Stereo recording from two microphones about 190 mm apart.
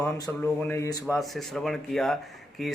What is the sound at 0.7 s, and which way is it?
Speech, 15° left (ahead or behind).